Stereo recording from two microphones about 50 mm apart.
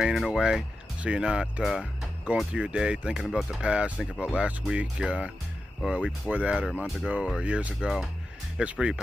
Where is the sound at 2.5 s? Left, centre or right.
Centre.